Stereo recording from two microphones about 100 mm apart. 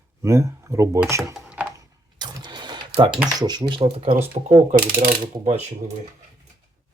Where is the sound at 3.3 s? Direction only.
45° right (ahead or behind); by 4.1 s 60° right (ahead or behind).